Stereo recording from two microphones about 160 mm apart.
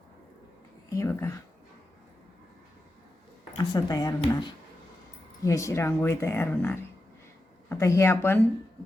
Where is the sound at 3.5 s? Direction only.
25° left (ahead or behind).